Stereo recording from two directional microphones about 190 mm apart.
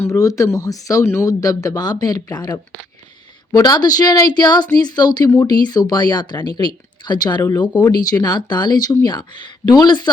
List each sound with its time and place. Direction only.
0.1 s speech: 15° left (ahead or behind)